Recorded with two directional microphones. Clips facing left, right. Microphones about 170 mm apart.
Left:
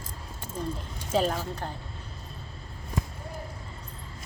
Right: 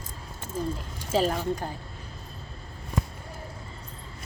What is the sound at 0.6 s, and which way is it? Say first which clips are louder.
Speech: right 3 dB; 5° right (ahead or behind).